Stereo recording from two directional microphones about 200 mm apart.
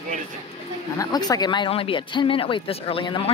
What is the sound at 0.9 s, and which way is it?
Speech, 20° left (ahead or behind).